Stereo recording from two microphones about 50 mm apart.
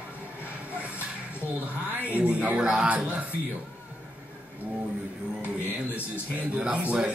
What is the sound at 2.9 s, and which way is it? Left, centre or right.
Speech, right.